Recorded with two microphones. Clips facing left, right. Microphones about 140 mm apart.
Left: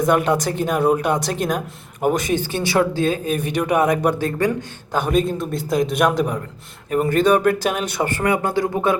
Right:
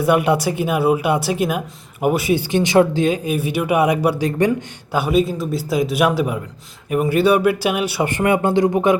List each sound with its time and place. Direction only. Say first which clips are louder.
0.0 s speech: right 2 dB; 10° right (ahead or behind)
4.9 s a man's voice: right 2 dB; 5° right (ahead or behind)
8.1 s speech: right 4 dB; 25° right (ahead or behind)